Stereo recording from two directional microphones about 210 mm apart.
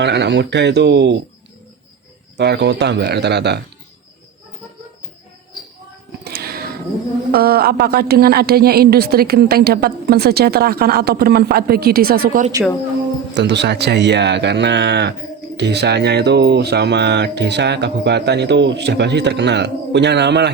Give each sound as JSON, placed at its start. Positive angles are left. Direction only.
{"t": 0.0, "sound": "speech", "side_deg": -55}
{"t": 2.4, "sound": "a woman's voice", "side_deg": -55}
{"t": 6.2, "sound": "music", "side_deg": -45}
{"t": 7.3, "sound": "a woman's voice", "side_deg": -45}
{"t": 13.3, "sound": "speech", "side_deg": -55}